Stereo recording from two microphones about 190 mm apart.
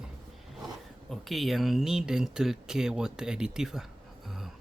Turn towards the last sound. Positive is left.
turn(degrees=0)  # may be behind; listen again after turning